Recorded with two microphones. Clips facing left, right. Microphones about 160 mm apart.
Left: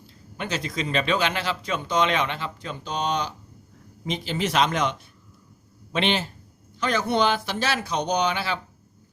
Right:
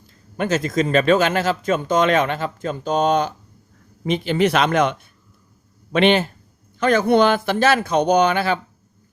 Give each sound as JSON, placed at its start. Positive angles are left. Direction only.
{"t": 0.3, "sound": "speech", "side_deg": -45}